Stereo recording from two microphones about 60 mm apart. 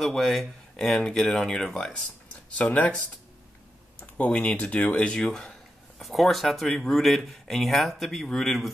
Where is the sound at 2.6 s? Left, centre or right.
Left.